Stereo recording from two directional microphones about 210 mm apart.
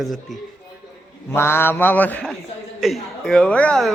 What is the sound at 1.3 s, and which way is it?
A man's voice, 10° left (ahead or behind).